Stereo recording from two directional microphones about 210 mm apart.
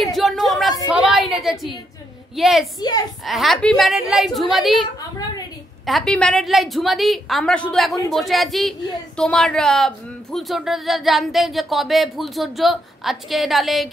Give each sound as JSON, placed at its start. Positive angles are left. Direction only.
{"t": 0.0, "sound": "a sound", "side_deg": 0}
{"t": 2.3, "sound": "speech", "side_deg": 0}
{"t": 2.8, "sound": "a child's voice", "side_deg": 20}
{"t": 3.3, "sound": "speech", "side_deg": 0}
{"t": 5.9, "sound": "speech", "side_deg": 0}